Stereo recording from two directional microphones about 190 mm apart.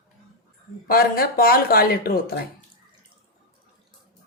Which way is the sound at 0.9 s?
50° left (ahead or behind).